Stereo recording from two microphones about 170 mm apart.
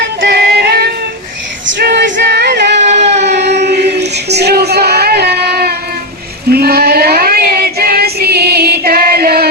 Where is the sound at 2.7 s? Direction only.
40° right (ahead or behind).